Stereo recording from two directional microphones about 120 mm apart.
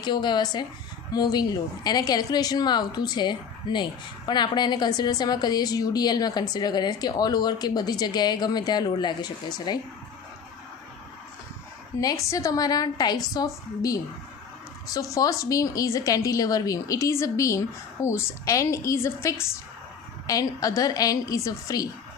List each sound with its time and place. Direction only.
0.0 s a woman's voice: 40° left (ahead or behind)
11.9 s a woman's voice: 25° left (ahead or behind)